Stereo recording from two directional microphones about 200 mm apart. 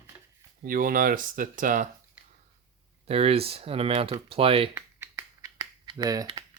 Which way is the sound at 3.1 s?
30° right (ahead or behind).